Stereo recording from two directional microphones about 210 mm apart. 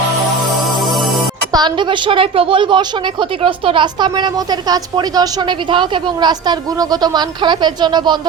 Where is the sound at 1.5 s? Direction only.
20° right (ahead or behind).